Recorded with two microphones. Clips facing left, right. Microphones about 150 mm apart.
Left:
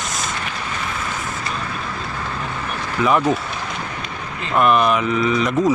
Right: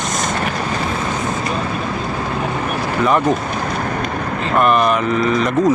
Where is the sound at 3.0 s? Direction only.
Centre (ahead or behind).